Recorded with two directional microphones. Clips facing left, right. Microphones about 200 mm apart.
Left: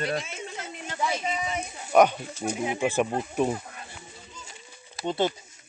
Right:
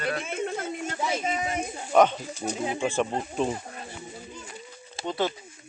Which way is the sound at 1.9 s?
10° left (ahead or behind).